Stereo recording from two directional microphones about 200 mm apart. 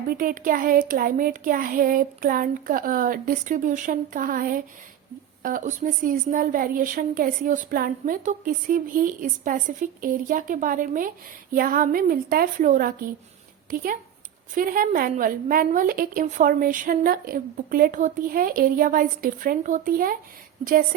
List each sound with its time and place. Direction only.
0.1 s a woman's voice: 45° right (ahead or behind)